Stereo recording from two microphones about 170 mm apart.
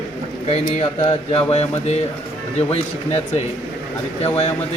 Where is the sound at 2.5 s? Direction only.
35° left (ahead or behind).